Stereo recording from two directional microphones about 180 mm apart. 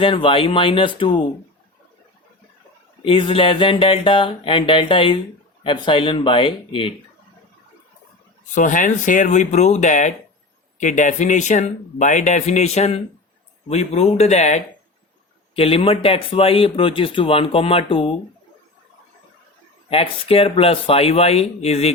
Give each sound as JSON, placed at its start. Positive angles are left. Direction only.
{"t": 0.0, "sound": "speech", "side_deg": 30}
{"t": 3.0, "sound": "speech", "side_deg": 30}
{"t": 8.5, "sound": "speech", "side_deg": 45}
{"t": 19.9, "sound": "speech", "side_deg": 30}